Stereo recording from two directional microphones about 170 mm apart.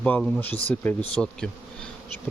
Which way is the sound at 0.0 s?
10° left (ahead or behind).